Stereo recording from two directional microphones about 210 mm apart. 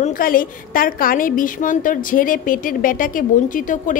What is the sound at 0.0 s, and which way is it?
A woman's voice, 40° left (ahead or behind).